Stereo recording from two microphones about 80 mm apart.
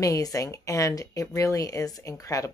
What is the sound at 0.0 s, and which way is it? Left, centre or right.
Speech, left.